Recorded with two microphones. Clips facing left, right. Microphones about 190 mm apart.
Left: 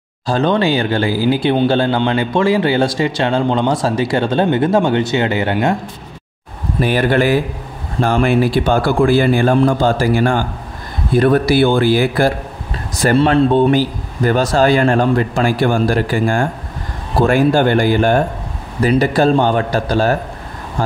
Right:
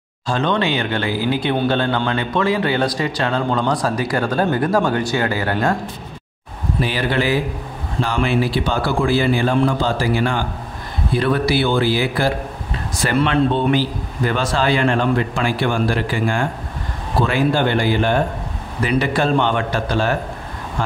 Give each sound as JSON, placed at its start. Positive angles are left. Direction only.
{"t": 0.3, "sound": "speech", "side_deg": 35}
{"t": 6.8, "sound": "a man's voice", "side_deg": 50}
{"t": 13.0, "sound": "a man's voice", "side_deg": 35}